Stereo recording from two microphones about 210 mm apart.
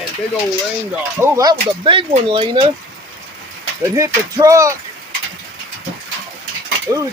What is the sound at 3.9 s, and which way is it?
Speech, 15° right (ahead or behind).